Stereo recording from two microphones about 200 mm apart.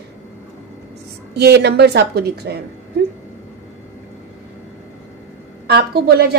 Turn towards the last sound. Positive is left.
turn(degrees=-55)  # may be behind; listen again after turning